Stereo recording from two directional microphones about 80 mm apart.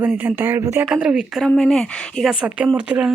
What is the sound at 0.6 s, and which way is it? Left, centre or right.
Speech, right.